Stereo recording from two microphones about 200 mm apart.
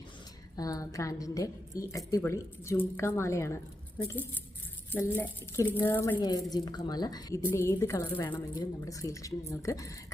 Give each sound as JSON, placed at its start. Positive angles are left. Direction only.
{"t": 0.5, "sound": "a woman's voice", "side_deg": 20}